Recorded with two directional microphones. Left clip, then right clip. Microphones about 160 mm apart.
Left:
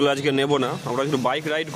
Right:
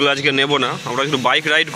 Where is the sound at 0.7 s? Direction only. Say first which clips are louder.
Right 4 dB; centre (ahead or behind).